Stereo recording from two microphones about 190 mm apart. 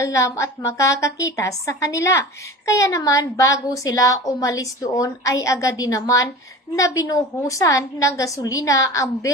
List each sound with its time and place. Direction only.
0.0 s a woman's voice: 15° left (ahead or behind)